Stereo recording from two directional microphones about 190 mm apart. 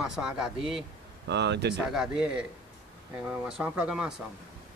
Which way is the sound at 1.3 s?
65° right (ahead or behind).